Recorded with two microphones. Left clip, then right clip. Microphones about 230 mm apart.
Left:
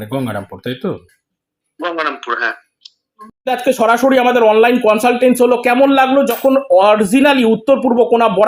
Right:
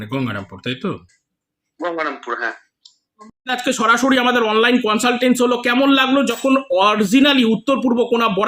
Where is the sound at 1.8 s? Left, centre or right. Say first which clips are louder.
Left 4 dB; centre.